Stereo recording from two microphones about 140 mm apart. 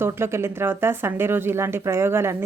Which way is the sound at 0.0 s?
20° right (ahead or behind).